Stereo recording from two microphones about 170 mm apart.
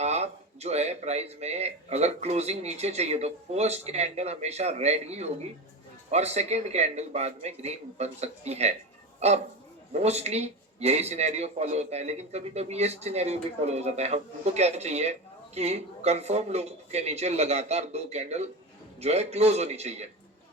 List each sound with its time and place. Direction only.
0.0 s speech: 40° right (ahead or behind)